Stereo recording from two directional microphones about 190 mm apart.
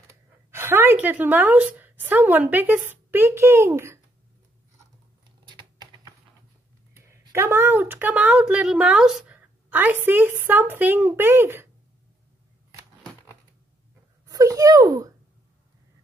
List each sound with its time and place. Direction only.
0.5 s a woman's voice: 10° right (ahead or behind)
5.6 s typing: 20° right (ahead or behind)
7.1 s a woman's voice: 15° right (ahead or behind)
14.2 s a sound: 20° right (ahead or behind)